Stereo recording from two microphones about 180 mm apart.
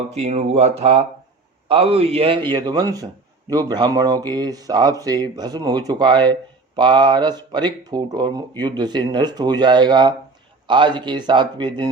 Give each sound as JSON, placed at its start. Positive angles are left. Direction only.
{"t": 0.1, "sound": "a man's voice", "side_deg": -35}
{"t": 2.5, "sound": "speech", "side_deg": -20}